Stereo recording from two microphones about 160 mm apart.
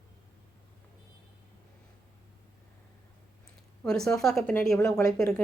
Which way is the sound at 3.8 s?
5° left (ahead or behind).